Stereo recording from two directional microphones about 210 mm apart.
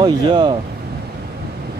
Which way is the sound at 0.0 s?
20° right (ahead or behind).